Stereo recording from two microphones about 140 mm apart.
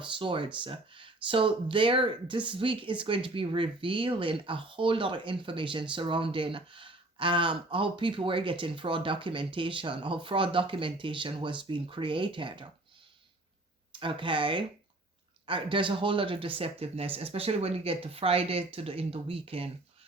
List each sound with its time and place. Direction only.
0.0 s speech: 35° right (ahead or behind)
14.0 s speech: 35° right (ahead or behind)